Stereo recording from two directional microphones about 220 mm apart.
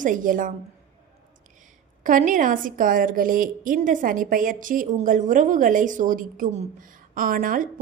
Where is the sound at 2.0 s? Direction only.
35° right (ahead or behind).